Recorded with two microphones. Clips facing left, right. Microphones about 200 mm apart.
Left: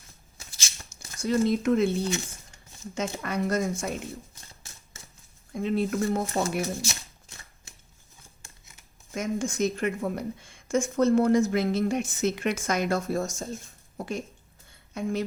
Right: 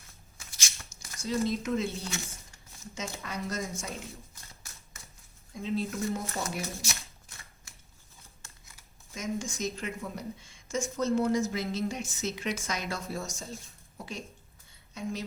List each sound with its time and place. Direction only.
0.9 s a sound: 55° left (ahead or behind)
1.5 s speech: 55° left (ahead or behind)
5.5 s speech: 60° left (ahead or behind)
6.8 s shuffling cards: 25° left (ahead or behind)
9.1 s speech: 55° left (ahead or behind)
14.7 s a sound: 55° left (ahead or behind)